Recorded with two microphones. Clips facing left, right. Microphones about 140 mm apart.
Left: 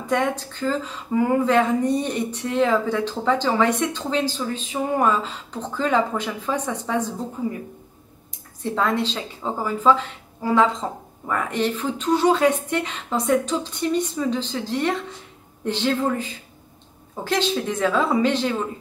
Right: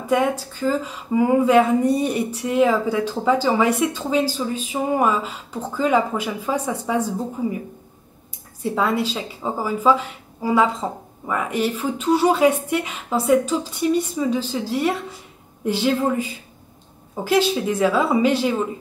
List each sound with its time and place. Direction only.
0.0 s speech: 10° right (ahead or behind)
8.6 s speech: 10° right (ahead or behind)